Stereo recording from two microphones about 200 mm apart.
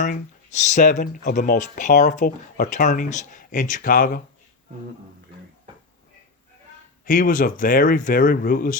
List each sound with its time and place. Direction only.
0.0 s speech: 40° left (ahead or behind)
7.0 s speech: 45° left (ahead or behind)